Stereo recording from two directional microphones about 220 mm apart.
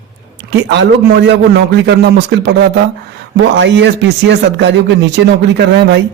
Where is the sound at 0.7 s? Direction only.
50° right (ahead or behind).